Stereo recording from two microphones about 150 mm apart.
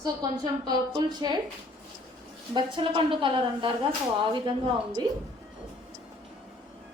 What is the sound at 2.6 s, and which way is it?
A woman's voice, 35° right (ahead or behind).